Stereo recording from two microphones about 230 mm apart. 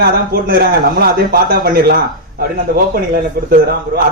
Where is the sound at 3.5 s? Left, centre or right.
Right.